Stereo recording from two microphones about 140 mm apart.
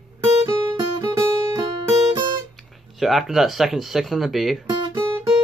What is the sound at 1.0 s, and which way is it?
Guitar, 25° right (ahead or behind).